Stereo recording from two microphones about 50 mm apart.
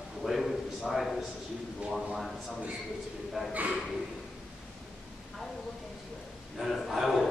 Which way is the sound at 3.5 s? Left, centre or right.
Right.